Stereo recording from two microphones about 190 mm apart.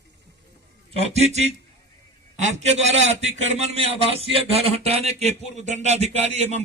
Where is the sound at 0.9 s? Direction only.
35° right (ahead or behind).